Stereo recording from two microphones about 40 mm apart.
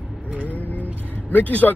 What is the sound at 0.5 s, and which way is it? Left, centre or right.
Vehicle, left.